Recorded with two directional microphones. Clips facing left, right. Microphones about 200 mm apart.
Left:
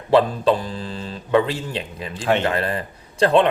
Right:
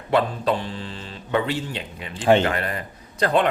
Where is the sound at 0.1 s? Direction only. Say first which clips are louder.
Left 5 dB; 35° left (ahead or behind).